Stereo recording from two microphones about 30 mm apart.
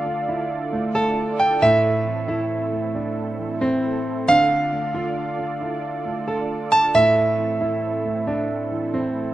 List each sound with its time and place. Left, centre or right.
0.9 s music: left
4.4 s music: centre
6.7 s music: left
7.2 s music: centre